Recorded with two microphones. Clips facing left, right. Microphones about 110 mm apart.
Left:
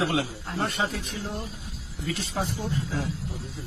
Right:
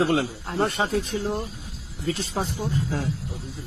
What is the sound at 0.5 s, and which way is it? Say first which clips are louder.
Speech: right 5 dB; 35° right (ahead or behind).